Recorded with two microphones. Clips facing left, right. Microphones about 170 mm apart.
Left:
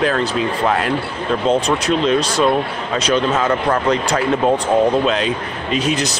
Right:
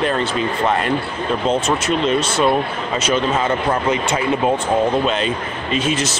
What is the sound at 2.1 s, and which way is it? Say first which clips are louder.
Speech: left 1 dB; 35° left (ahead or behind).